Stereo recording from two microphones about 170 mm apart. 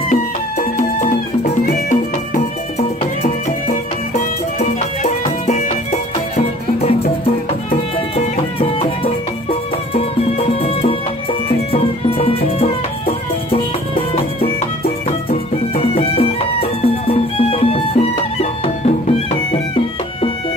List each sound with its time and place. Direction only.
0.1 s music: 50° left (ahead or behind)
3.2 s music: 40° left (ahead or behind)
15.0 s music: 35° left (ahead or behind)